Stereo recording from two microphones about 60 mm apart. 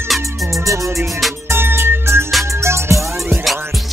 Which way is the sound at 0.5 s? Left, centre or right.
Right.